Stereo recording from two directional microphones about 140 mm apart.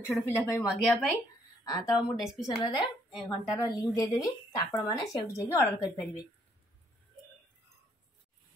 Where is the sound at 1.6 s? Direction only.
25° left (ahead or behind).